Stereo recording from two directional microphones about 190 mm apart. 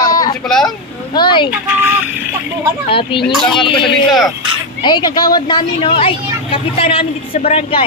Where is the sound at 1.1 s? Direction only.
25° left (ahead or behind).